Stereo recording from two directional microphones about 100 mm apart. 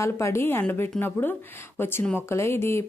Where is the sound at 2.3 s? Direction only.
25° left (ahead or behind).